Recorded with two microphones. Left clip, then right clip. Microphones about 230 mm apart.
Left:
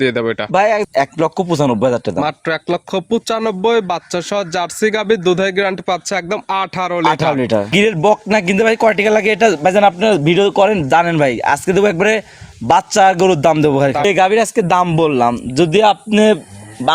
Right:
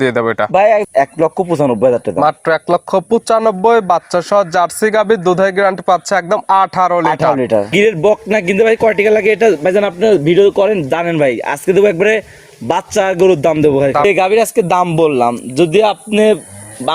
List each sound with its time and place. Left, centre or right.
0.0 s speech: centre
0.5 s a man's voice: left
2.2 s speech: left
2.9 s speech: centre
3.7 s speech: centre
7.3 s a man's voice: left